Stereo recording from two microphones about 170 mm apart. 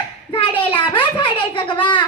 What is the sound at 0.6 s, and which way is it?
Child singing, 30° left (ahead or behind).